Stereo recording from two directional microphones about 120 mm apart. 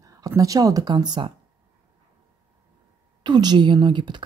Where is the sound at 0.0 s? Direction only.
30° right (ahead or behind).